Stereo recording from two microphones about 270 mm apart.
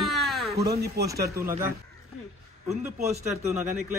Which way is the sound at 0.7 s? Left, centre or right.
Right.